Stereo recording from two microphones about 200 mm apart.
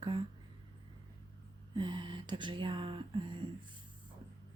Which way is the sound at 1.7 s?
25° right (ahead or behind).